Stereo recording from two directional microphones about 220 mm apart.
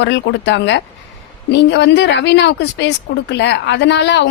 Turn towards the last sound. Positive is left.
turn(degrees=50)  # may be behind; listen again after turning